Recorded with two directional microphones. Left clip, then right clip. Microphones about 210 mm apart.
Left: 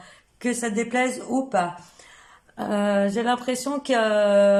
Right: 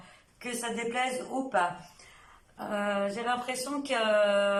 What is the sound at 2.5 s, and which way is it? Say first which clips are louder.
Speech: left 8 dB; 40° left (ahead or behind).